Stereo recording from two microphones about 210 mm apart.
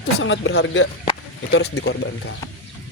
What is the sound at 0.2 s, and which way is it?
Speech, 65° left (ahead or behind).